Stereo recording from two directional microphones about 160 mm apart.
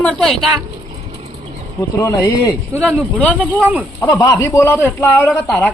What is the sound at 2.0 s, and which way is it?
Speech, 20° left (ahead or behind).